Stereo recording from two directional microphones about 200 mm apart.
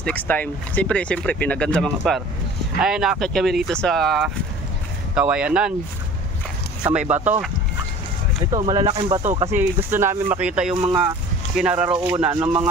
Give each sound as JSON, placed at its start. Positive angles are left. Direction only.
{"t": 0.0, "sound": "speech", "side_deg": 10}
{"t": 6.9, "sound": "speech", "side_deg": -5}
{"t": 8.5, "sound": "speech", "side_deg": -20}
{"t": 9.2, "sound": "speech", "side_deg": -35}
{"t": 9.5, "sound": "speech", "side_deg": -10}
{"t": 10.7, "sound": "speech", "side_deg": -25}
{"t": 11.5, "sound": "speech", "side_deg": -5}
{"t": 11.9, "sound": "speech", "side_deg": -25}
{"t": 12.3, "sound": "speech", "side_deg": -10}